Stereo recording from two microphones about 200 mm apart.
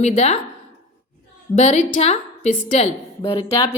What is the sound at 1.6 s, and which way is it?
A woman's voice, 35° left (ahead or behind).